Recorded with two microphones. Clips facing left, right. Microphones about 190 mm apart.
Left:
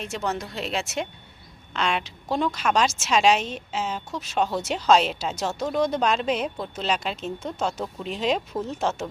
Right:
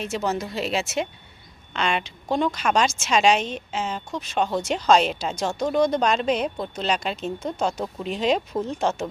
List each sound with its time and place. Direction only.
0.0 s a woman's voice: 5° right (ahead or behind)